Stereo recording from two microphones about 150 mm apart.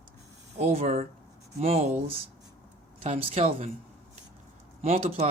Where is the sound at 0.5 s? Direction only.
45° right (ahead or behind).